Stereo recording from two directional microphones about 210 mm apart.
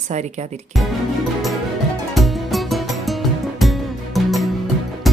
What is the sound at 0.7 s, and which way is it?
Speech, centre (ahead or behind).